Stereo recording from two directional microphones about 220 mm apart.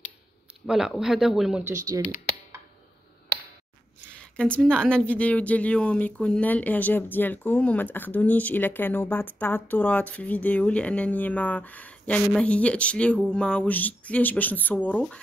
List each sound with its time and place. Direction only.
0.7 s speech: centre (ahead or behind)
1.9 s speech: 15° right (ahead or behind)
4.2 s speech: 5° left (ahead or behind)